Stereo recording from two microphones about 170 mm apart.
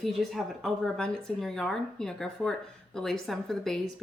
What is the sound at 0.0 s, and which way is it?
A woman's voice, centre (ahead or behind).